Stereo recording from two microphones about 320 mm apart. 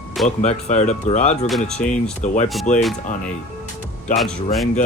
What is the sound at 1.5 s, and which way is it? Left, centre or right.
Speech, centre.